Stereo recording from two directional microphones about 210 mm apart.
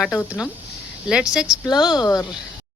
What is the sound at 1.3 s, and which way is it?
Speech, 5° right (ahead or behind).